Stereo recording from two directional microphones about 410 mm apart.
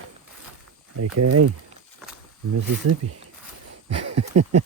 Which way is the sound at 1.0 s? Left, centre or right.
Right.